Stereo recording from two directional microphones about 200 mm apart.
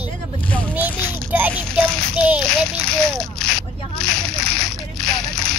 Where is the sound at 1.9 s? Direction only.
5° right (ahead or behind).